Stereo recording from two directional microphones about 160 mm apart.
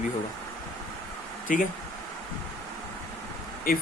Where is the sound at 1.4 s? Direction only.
60° left (ahead or behind).